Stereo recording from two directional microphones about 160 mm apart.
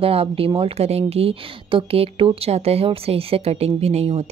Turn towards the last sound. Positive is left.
turn(degrees=-40)  # may be behind; listen again after turning